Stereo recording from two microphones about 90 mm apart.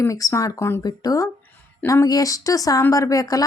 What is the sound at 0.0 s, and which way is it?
Speech, 40° left (ahead or behind).